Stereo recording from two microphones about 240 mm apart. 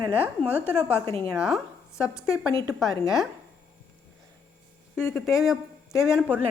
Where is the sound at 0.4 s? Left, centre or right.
Centre.